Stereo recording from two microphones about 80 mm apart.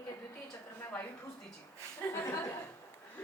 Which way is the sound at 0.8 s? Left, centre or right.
Left.